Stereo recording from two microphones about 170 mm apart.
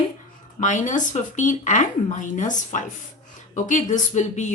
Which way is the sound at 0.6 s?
50° left (ahead or behind).